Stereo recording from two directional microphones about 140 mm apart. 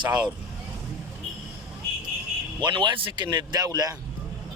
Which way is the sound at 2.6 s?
35° right (ahead or behind).